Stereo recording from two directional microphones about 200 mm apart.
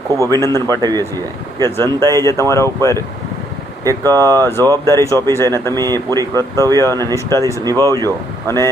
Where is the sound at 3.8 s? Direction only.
15° right (ahead or behind).